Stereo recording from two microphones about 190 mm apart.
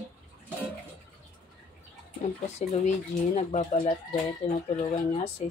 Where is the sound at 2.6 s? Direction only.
40° left (ahead or behind).